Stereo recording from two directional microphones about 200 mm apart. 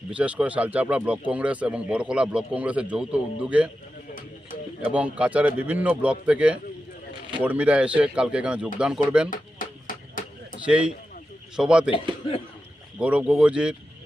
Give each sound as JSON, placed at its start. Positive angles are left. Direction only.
{"t": 0.1, "sound": "speech", "side_deg": -5}
{"t": 4.8, "sound": "speech", "side_deg": -5}
{"t": 9.3, "sound": "a sound", "side_deg": 40}
{"t": 10.7, "sound": "speech", "side_deg": -5}
{"t": 13.0, "sound": "speech", "side_deg": -5}